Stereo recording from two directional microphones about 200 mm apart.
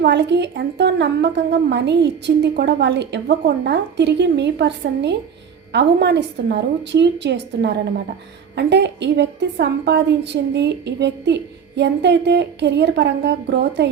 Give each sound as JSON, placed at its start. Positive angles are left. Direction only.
{"t": 0.0, "sound": "a woman's voice", "side_deg": -60}